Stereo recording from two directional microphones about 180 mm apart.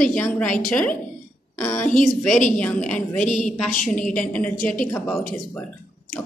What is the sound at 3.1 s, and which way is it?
Speech, 40° left (ahead or behind).